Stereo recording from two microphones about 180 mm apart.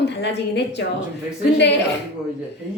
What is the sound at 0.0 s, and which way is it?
Speech, 70° left (ahead or behind).